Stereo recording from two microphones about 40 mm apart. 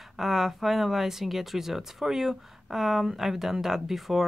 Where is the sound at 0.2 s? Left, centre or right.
Centre.